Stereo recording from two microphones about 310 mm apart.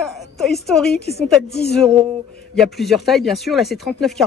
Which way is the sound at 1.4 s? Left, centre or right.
Left.